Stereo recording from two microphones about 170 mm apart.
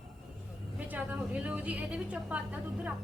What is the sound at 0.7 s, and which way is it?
A woman's voice, 10° right (ahead or behind).